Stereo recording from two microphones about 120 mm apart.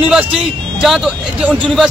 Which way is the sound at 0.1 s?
5° right (ahead or behind).